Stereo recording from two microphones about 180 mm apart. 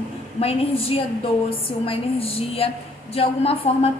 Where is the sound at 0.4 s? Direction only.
30° left (ahead or behind).